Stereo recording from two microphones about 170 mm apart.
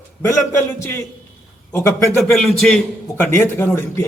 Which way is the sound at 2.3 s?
5° left (ahead or behind).